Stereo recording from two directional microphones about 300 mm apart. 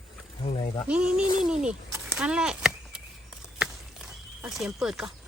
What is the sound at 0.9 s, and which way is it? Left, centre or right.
Speech, centre.